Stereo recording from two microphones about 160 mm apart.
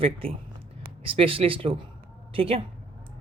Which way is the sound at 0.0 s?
35° right (ahead or behind).